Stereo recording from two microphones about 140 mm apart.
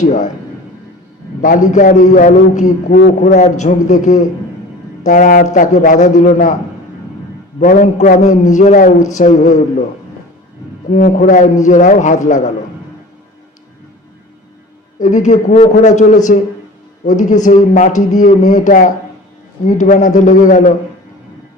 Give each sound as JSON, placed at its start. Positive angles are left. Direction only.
{"t": 0.0, "sound": "a man's voice", "side_deg": 60}
{"t": 1.4, "sound": "a man's voice", "side_deg": 70}
{"t": 7.6, "sound": "a man's voice", "side_deg": 60}
{"t": 10.9, "sound": "a man's voice", "side_deg": 70}
{"t": 14.9, "sound": "a man's voice", "side_deg": 65}